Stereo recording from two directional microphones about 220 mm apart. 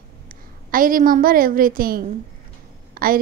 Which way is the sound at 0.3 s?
40° right (ahead or behind).